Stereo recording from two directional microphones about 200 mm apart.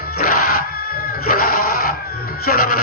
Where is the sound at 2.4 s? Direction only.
50° left (ahead or behind).